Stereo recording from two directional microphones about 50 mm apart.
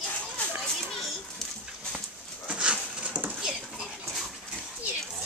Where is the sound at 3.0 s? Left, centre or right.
Right.